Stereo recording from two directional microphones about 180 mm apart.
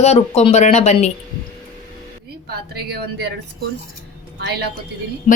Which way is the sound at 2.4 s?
60° right (ahead or behind).